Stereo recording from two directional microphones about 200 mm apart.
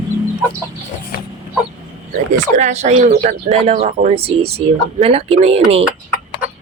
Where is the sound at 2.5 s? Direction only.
35° right (ahead or behind).